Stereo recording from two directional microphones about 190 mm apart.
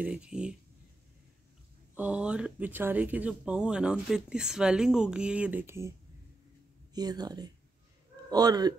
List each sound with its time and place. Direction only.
0.0 s speech: 5° right (ahead or behind)
2.0 s speech: 5° right (ahead or behind)